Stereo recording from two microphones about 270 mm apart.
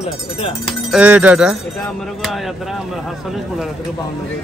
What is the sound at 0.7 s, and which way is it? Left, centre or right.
Speech, centre.